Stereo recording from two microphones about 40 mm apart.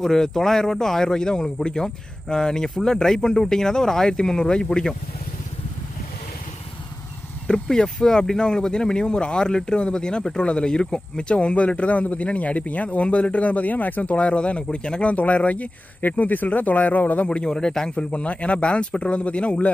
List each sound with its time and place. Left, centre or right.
0.0 s speech: centre
7.4 s speech: centre; by 14.1 s left
14.1 s speech: left
15.1 s speech: left
17.5 s speech: centre
18.1 s speech: left